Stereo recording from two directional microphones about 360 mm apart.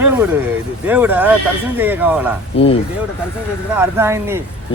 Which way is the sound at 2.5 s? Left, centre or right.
Centre.